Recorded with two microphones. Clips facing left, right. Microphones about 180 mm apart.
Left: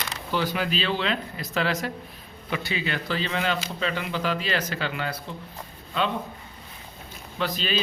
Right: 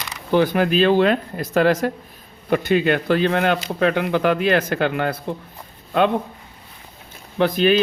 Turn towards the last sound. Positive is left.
turn(degrees=-55)  # may be behind; listen again after turning